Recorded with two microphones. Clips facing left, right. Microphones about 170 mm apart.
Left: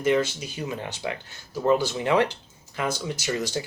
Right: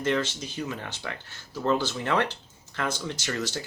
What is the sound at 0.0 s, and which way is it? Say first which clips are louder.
Speech: left 4 dB; 10° left (ahead or behind).